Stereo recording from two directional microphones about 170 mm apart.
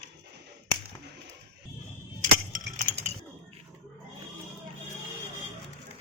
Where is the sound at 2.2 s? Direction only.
55° right (ahead or behind).